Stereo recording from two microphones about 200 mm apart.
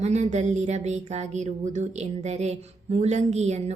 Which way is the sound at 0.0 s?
35° right (ahead or behind).